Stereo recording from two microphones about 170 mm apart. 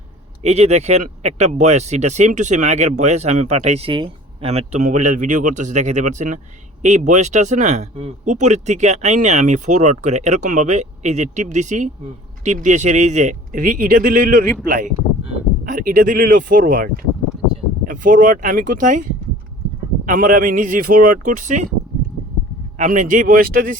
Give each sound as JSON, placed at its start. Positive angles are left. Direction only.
{"t": 0.4, "sound": "speech", "side_deg": -40}
{"t": 20.1, "sound": "speech", "side_deg": -50}
{"t": 22.8, "sound": "speech", "side_deg": -50}